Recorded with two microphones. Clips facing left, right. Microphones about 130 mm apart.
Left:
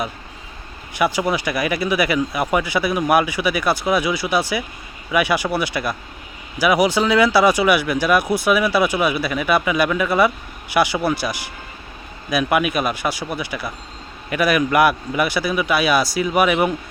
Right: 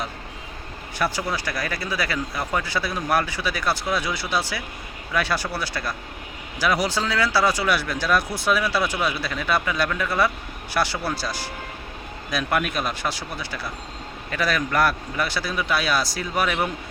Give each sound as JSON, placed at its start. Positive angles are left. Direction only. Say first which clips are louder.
{"t": 0.9, "sound": "speech", "louder": "left 6 dB", "side_deg": 15}